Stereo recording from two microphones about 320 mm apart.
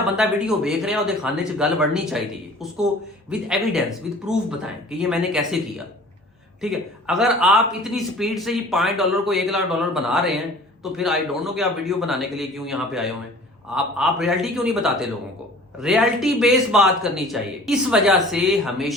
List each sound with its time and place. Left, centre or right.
0.2 s a man's voice: centre
4.9 s a man's voice: centre